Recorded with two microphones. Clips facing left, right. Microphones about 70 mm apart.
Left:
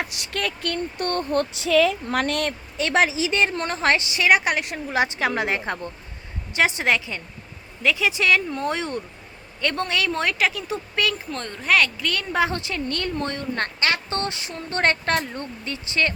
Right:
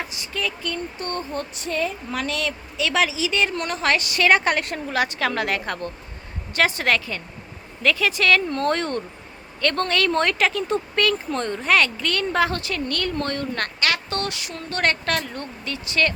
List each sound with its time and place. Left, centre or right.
0.1 s speech: left
1.2 s speech: left
2.0 s a woman's voice: left; by 12.4 s centre
12.4 s a woman's voice: left
13.7 s a woman's voice: left